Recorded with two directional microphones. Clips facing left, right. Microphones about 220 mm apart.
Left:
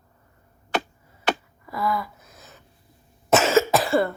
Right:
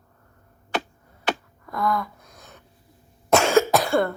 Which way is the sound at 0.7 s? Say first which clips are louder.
Left 1 dB; 50° left (ahead or behind).